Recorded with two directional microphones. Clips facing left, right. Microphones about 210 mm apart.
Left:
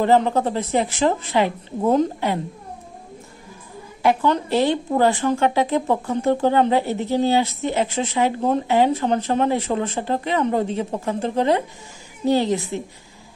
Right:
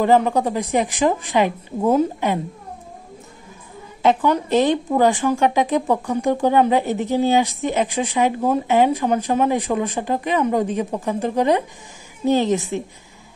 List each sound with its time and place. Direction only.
0.0 s speech: 15° right (ahead or behind)
4.0 s a woman's voice: 20° right (ahead or behind)